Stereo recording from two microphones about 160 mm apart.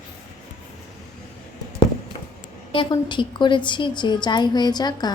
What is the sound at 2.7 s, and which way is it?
A woman's voice, 30° left (ahead or behind).